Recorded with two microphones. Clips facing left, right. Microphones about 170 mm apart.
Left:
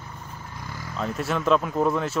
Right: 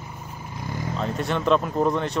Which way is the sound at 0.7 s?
20° right (ahead or behind).